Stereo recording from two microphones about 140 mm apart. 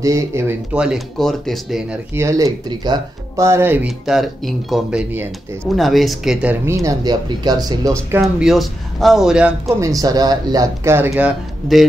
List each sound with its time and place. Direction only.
0.0 s speech: 20° right (ahead or behind)
0.7 s speech: 5° right (ahead or behind)
2.1 s speech: 20° right (ahead or behind)
3.4 s a man's voice: 15° right (ahead or behind)
3.8 s speech: centre (ahead or behind)
6.6 s speech: 20° right (ahead or behind)
8.2 s speech: centre (ahead or behind)
9.8 s speech: 25° right (ahead or behind)
11.1 s a man's voice: 10° right (ahead or behind)